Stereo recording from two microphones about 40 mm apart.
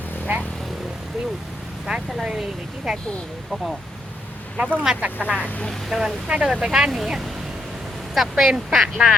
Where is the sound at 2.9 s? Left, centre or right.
Centre.